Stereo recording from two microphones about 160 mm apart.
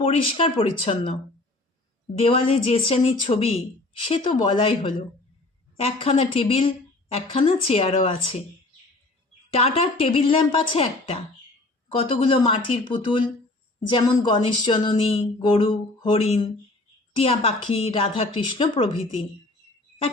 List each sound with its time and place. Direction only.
0.0 s speech: 35° left (ahead or behind)
9.6 s speech: 35° left (ahead or behind)